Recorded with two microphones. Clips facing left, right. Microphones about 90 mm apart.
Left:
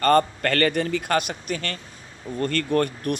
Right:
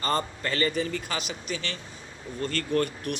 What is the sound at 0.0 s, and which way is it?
A man's voice, 60° left (ahead or behind).